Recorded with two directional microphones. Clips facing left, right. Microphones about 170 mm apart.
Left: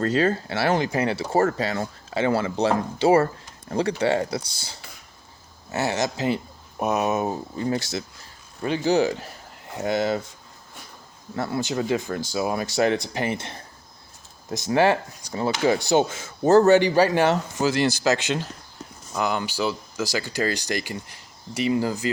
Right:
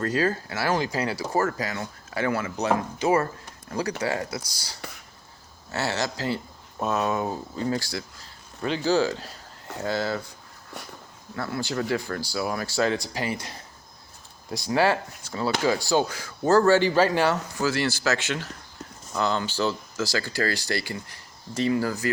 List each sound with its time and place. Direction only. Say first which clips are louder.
0.0 s speech: left 3 dB; 25° left (ahead or behind)
5.7 s speech: left 3 dB; 20° left (ahead or behind)
11.3 s speech: left 3 dB; 20° left (ahead or behind)